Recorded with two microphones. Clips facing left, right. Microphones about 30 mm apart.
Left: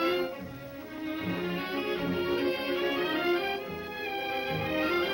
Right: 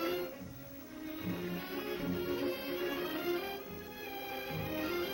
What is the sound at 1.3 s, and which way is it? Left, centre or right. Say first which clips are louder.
Music: left 6 dB; left.